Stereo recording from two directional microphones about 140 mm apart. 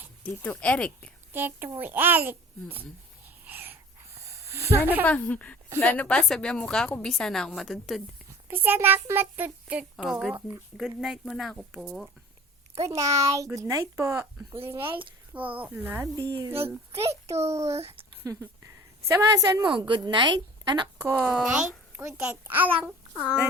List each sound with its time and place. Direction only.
0.2 s speech: 10° left (ahead or behind)
1.3 s a child's voice: 15° right (ahead or behind)
3.2 s wheeze: 15° right (ahead or behind)
4.2 s a sound: 20° right (ahead or behind)
5.0 s a woman's voice: 10° left (ahead or behind)
8.4 s a child's voice: 15° right (ahead or behind)
12.9 s a child's voice: 25° right (ahead or behind)
16.2 s speech: 35° right (ahead or behind)
16.5 s speech: 15° right (ahead or behind)
17.3 s speech: 50° right (ahead or behind)
18.2 s a woman's voice: 20° right (ahead or behind)
20.8 s a child's voice: 15° right (ahead or behind)
23.1 s speech: 10° left (ahead or behind)